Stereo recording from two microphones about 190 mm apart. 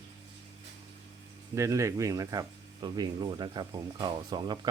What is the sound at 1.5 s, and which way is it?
Speech, 15° right (ahead or behind).